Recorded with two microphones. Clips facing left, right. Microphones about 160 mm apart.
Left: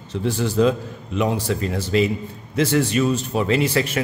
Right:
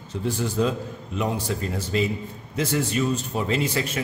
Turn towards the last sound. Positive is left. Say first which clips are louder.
# left 5 dB
turn(degrees=80)